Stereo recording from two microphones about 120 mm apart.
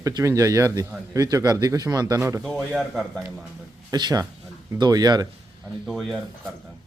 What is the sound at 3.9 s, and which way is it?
A man's voice, 35° right (ahead or behind).